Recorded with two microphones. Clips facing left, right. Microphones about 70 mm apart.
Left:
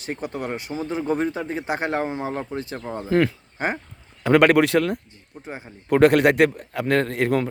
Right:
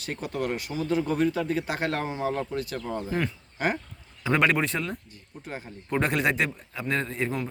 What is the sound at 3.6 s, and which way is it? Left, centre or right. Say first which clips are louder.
Speech: left 2 dB; left.